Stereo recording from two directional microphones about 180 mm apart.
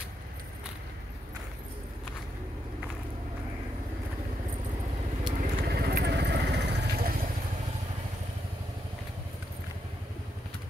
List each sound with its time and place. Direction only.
5.4 s vehicle: 60° right (ahead or behind)